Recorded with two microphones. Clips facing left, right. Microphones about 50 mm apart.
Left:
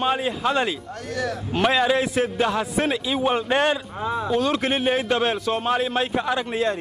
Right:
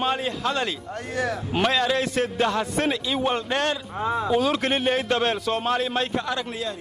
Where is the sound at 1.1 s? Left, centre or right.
Right.